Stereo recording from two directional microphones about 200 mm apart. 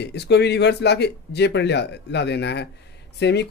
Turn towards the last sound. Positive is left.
turn(degrees=55)  # may be behind; listen again after turning